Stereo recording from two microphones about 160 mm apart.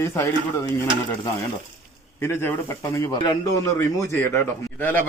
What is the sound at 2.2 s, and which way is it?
A man's voice, 15° left (ahead or behind).